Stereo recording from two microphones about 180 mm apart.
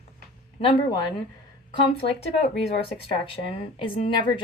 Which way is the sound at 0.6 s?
30° left (ahead or behind).